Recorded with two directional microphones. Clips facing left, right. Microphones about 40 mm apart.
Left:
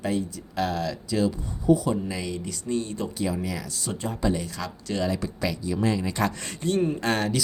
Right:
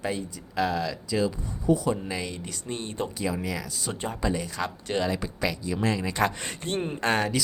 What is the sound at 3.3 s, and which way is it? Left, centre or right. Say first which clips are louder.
Speech: left 1 dB; centre.